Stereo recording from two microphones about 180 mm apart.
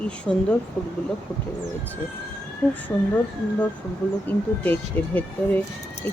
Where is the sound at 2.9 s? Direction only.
15° left (ahead or behind).